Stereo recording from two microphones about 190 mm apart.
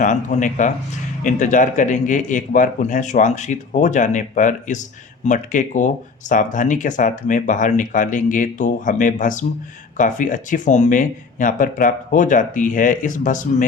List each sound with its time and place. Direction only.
0.0 s speech: 40° left (ahead or behind)